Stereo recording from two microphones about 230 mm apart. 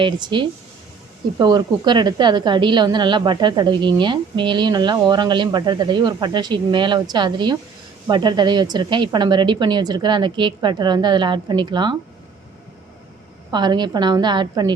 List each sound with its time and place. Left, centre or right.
0.0 s a woman's voice: centre
13.5 s a woman's voice: centre